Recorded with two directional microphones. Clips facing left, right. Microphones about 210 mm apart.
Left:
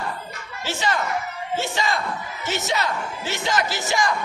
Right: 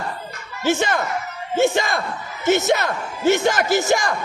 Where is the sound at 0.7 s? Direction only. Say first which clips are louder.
Right 5 dB; 50° right (ahead or behind).